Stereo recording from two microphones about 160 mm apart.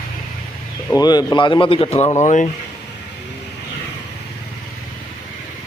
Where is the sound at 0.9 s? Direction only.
25° left (ahead or behind); by 2.5 s 50° left (ahead or behind).